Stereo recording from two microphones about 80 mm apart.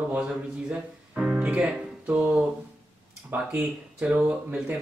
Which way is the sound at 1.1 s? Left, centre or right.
Centre.